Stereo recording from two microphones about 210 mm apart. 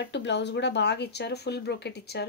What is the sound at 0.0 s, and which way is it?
Speech, 55° left (ahead or behind).